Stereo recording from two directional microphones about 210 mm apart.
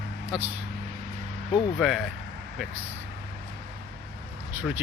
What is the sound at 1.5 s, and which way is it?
Speech, centre (ahead or behind).